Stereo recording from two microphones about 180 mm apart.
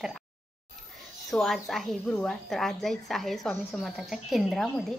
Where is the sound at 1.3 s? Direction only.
Centre (ahead or behind).